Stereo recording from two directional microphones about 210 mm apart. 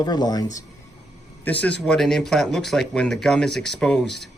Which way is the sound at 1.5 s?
5° left (ahead or behind).